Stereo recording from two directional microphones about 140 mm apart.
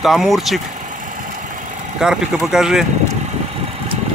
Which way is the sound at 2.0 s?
5° right (ahead or behind).